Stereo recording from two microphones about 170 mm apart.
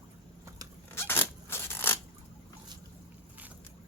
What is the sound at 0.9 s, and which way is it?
Scissors, 15° left (ahead or behind).